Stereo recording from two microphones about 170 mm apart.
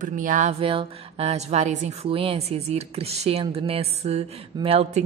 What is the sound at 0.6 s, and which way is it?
A woman's voice, 35° right (ahead or behind).